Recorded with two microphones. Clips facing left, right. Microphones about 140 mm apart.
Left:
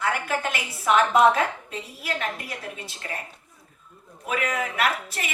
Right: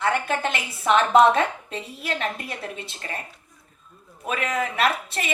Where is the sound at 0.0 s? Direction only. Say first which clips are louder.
Right 3 dB; 25° right (ahead or behind).